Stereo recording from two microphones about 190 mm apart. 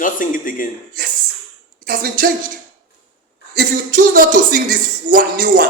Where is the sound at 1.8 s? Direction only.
50° right (ahead or behind).